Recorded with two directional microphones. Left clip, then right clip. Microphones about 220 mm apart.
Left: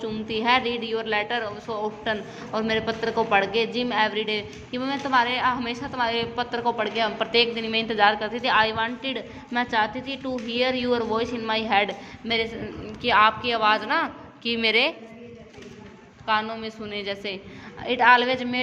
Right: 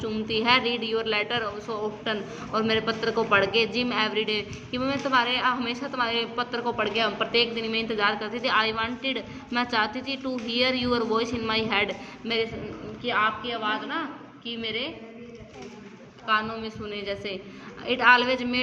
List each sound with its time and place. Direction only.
0.0 s a woman's voice: 15° left (ahead or behind)
13.0 s a woman's voice: 50° left (ahead or behind)
16.2 s a woman's voice: 30° left (ahead or behind)